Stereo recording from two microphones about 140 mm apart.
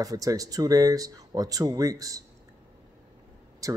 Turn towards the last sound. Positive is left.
turn(degrees=-25)  # may be behind; listen again after turning